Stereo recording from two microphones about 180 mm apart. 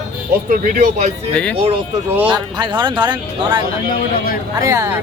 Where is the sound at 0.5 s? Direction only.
50° right (ahead or behind).